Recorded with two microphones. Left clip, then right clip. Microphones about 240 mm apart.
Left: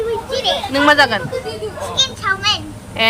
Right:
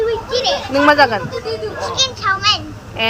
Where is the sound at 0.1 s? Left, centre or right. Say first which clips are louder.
Right 1 dB; centre.